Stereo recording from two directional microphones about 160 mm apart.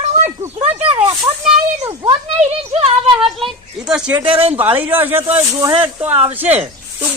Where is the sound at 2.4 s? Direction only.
40° right (ahead or behind).